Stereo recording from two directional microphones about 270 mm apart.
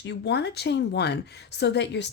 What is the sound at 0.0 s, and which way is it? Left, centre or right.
Speech, left.